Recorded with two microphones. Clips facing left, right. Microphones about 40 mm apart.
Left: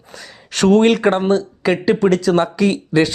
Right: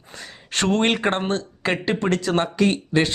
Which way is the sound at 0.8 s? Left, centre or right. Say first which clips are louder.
Left 7 dB; centre.